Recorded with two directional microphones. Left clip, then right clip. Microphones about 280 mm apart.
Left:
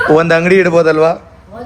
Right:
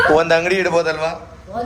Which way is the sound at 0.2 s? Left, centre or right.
Left.